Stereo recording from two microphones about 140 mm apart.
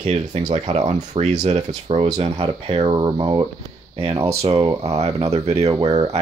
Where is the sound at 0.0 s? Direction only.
50° right (ahead or behind); by 3.4 s 35° right (ahead or behind).